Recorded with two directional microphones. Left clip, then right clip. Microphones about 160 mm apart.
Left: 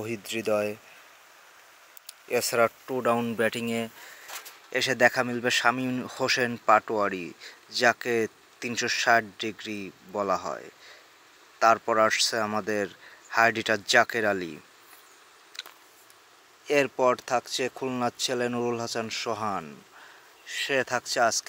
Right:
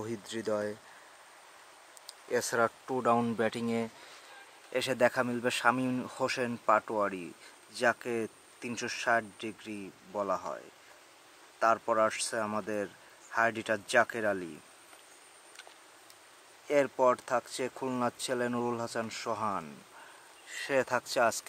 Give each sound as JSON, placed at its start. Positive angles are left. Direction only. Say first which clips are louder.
{"t": 0.0, "sound": "speech", "louder": "left 6 dB", "side_deg": 15}
{"t": 2.3, "sound": "speech", "louder": "left 5 dB", "side_deg": 10}
{"t": 11.6, "sound": "speech", "louder": "left 6 dB", "side_deg": 20}
{"t": 16.6, "sound": "speech", "louder": "left 3 dB", "side_deg": 20}